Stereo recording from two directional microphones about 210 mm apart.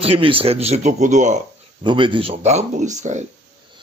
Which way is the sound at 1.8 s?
25° right (ahead or behind).